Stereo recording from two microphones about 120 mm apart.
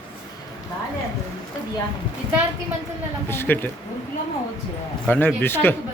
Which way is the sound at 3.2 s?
20° left (ahead or behind).